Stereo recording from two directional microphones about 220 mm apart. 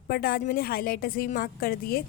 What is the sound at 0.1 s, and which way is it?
A woman's voice, 40° left (ahead or behind).